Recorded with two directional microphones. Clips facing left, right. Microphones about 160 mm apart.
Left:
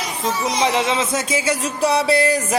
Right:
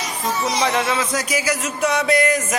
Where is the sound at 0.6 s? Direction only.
20° left (ahead or behind).